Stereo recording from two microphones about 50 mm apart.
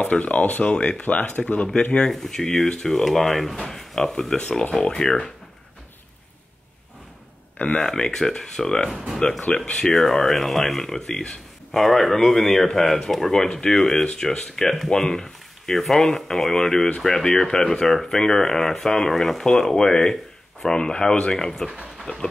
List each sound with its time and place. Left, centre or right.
0.0 s speech: left
7.5 s speech: left
7.8 s speech: centre
8.9 s speech: centre
9.7 s speech: centre
22.0 s a sound: centre